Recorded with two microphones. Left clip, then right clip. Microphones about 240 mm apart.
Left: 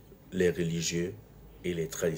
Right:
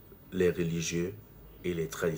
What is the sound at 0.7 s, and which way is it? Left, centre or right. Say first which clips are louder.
Speech: left 1 dB; right.